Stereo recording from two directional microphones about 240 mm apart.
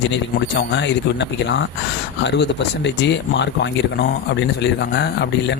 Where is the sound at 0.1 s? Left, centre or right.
Left.